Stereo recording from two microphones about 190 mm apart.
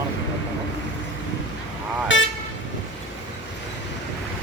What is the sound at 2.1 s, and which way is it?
Toot, 75° left (ahead or behind).